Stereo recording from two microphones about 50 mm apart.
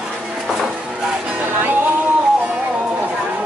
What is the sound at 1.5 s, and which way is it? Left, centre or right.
Music, right.